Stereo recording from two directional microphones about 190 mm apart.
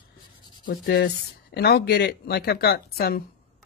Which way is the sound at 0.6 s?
45° left (ahead or behind).